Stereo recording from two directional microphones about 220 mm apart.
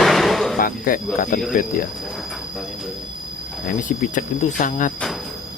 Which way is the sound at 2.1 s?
Centre (ahead or behind).